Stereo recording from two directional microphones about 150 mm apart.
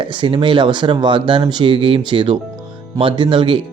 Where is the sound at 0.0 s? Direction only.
35° right (ahead or behind).